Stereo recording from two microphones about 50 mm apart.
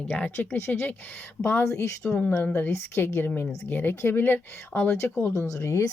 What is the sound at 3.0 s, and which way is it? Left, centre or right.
Speech, left.